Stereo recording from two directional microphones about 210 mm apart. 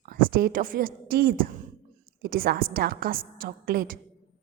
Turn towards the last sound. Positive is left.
turn(degrees=-45)  # may be behind; listen again after turning